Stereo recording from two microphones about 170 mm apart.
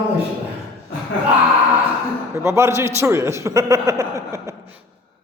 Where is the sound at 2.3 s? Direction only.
15° right (ahead or behind).